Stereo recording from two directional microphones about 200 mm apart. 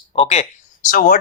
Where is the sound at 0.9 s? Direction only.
40° left (ahead or behind).